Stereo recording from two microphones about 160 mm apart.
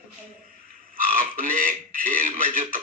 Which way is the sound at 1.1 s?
60° right (ahead or behind).